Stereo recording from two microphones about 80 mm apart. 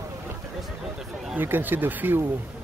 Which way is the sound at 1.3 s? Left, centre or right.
Right.